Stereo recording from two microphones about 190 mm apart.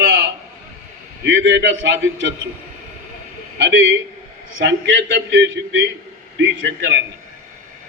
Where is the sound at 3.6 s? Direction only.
75° right (ahead or behind).